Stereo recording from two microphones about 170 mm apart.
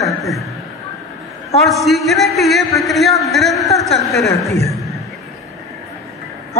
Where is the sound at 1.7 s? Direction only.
Centre (ahead or behind).